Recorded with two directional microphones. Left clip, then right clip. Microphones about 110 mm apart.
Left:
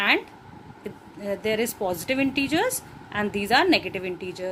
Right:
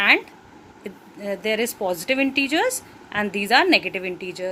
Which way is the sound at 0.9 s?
10° right (ahead or behind).